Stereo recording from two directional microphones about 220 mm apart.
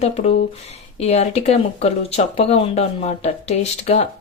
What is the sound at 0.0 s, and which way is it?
Speech, 30° left (ahead or behind).